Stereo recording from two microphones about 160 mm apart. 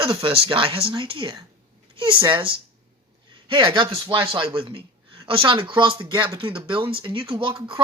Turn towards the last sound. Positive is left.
turn(degrees=-30)  # may be behind; listen again after turning